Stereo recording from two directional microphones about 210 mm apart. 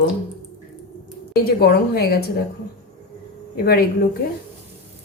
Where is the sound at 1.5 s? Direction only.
45° left (ahead or behind).